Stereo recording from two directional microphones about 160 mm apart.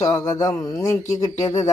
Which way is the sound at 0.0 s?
20° left (ahead or behind).